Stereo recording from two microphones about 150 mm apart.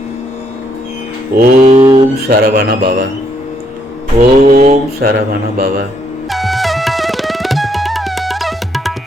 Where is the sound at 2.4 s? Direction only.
90° right.